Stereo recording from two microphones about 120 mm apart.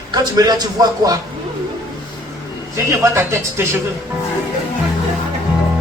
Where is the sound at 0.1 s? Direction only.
35° right (ahead or behind).